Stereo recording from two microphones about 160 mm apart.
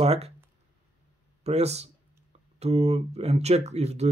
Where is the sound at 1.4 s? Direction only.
45° right (ahead or behind).